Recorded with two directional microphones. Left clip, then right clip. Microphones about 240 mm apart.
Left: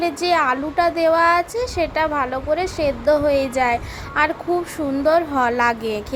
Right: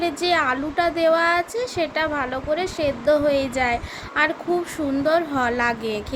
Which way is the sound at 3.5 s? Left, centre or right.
Centre.